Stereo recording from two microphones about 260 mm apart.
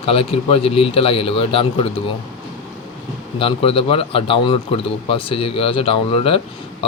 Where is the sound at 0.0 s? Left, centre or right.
Left.